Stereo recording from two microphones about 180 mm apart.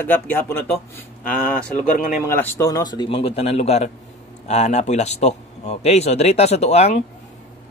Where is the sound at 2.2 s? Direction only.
10° left (ahead or behind); by 7.0 s 40° left (ahead or behind).